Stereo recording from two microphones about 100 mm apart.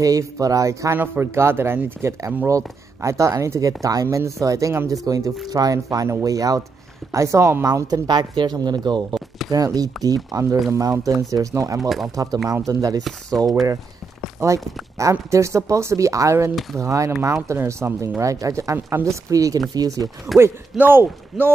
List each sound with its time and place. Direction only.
0.0 s speech: 35° right (ahead or behind)
0.9 s speech: 20° right (ahead or behind); by 13.0 s 35° right (ahead or behind)
14.4 s speech: 30° right (ahead or behind)
20.3 s speech: centre (ahead or behind)
20.7 s speech: 20° right (ahead or behind)